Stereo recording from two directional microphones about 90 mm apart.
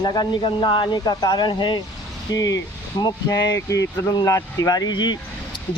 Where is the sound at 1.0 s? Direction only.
45° left (ahead or behind).